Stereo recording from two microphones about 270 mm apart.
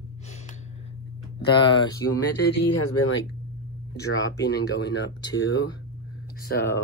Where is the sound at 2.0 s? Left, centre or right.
Left.